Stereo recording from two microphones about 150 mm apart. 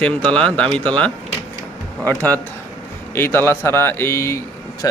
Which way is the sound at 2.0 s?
10° left (ahead or behind).